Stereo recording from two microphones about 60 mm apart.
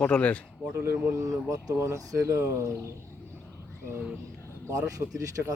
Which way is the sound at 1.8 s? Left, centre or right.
Right.